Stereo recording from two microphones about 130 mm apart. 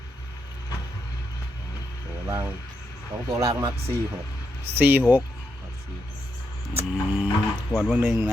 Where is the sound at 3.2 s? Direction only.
30° right (ahead or behind).